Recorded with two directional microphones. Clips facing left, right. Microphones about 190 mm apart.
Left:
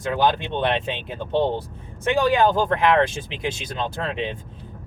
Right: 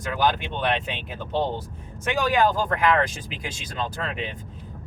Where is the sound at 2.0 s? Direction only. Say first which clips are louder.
Left 3 dB; 25° left (ahead or behind).